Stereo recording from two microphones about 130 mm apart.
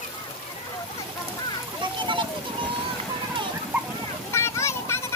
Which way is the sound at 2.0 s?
40° right (ahead or behind).